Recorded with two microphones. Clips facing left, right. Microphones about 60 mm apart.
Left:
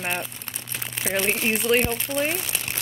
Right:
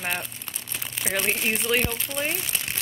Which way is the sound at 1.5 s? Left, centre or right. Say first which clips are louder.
Left 5 dB; centre.